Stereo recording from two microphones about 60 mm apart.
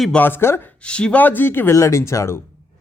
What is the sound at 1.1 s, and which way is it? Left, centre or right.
Speech, left.